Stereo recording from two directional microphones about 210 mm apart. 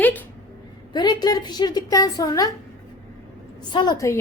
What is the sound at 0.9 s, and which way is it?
A woman's voice, 20° left (ahead or behind).